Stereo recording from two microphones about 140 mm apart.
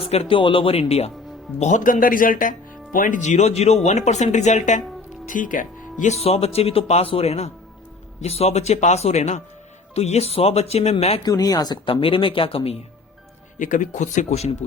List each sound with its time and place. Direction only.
0.0 s speech: 45° left (ahead or behind)
1.5 s speech: 60° left (ahead or behind)
11.2 s speech: 25° left (ahead or behind); by 12.8 s 45° left (ahead or behind)
13.6 s speech: 65° left (ahead or behind)